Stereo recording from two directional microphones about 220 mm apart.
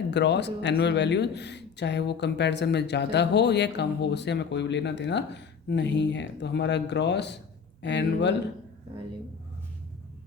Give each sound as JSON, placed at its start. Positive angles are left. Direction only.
{"t": 0.1, "sound": "speech", "side_deg": 50}